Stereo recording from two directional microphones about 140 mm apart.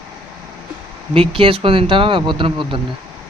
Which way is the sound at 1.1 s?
40° right (ahead or behind).